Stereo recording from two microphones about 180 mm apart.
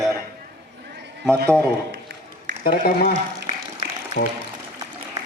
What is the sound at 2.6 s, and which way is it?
Speech, 55° left (ahead or behind).